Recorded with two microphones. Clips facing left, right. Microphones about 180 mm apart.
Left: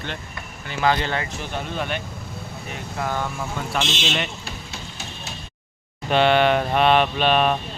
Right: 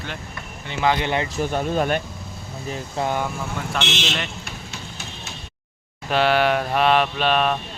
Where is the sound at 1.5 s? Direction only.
45° right (ahead or behind).